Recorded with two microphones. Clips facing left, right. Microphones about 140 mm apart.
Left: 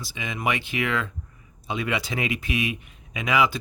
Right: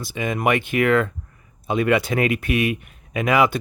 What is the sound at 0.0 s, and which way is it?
Speech, 50° right (ahead or behind).